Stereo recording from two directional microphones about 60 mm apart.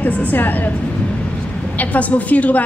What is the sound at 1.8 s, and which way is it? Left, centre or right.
Speech, left.